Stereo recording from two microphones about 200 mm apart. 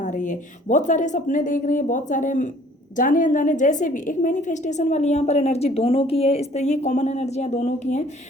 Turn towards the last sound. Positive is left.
turn(degrees=35)  # may be behind; listen again after turning